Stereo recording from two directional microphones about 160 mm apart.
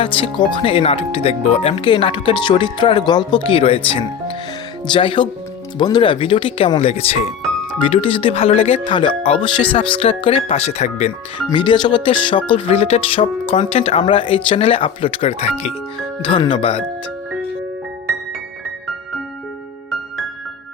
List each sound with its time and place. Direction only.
0.0 s speech: 30° left (ahead or behind)
11.4 s speech: 30° left (ahead or behind)
16.2 s speech: 30° left (ahead or behind)